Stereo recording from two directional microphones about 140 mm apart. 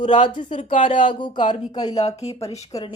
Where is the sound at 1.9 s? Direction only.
50° left (ahead or behind).